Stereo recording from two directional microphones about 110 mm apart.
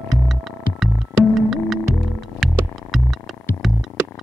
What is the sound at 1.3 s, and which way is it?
Music, centre (ahead or behind).